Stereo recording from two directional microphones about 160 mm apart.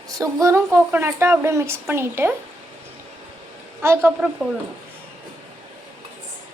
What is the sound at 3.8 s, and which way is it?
Speech, 15° right (ahead or behind).